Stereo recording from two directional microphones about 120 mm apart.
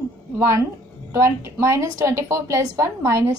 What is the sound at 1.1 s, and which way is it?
A woman's voice, 25° right (ahead or behind).